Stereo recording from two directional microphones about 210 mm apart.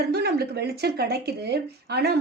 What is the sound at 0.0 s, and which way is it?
A woman's voice, 50° right (ahead or behind).